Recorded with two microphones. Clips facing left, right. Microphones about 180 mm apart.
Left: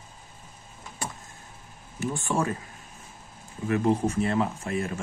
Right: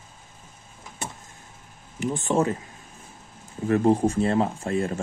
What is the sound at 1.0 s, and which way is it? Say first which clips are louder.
Vehicle: even; 25° right (ahead or behind).